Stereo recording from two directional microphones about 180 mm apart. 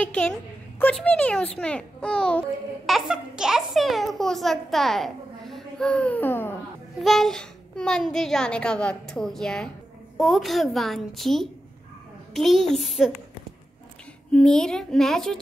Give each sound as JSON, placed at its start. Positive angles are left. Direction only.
{"t": 0.0, "sound": "a child's voice", "side_deg": 5}
{"t": 7.0, "sound": "a child's voice", "side_deg": 0}
{"t": 14.3, "sound": "a child's voice", "side_deg": 5}